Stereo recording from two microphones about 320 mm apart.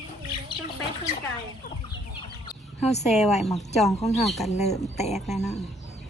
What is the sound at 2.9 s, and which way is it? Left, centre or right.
Speech, centre.